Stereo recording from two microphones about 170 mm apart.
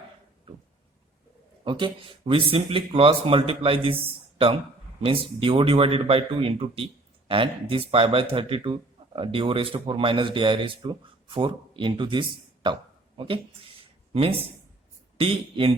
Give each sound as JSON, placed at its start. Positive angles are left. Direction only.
{"t": 1.6, "sound": "speech", "side_deg": -30}